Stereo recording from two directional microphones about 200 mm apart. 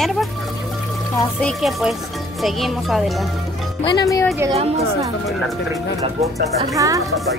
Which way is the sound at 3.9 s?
15° left (ahead or behind).